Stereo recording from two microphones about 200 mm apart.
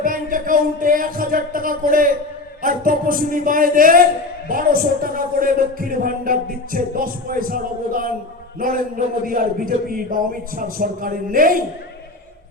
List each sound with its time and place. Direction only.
0.0 s a man's voice: 45° right (ahead or behind)